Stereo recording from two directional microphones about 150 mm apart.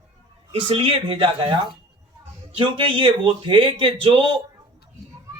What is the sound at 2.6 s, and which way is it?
Speech, 35° right (ahead or behind).